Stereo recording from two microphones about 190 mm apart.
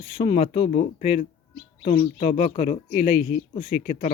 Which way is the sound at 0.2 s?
35° left (ahead or behind).